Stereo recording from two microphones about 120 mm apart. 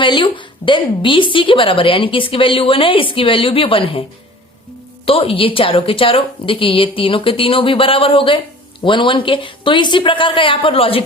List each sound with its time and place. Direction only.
0.0 s a woman's voice: 45° left (ahead or behind)
5.0 s a woman's voice: 50° left (ahead or behind)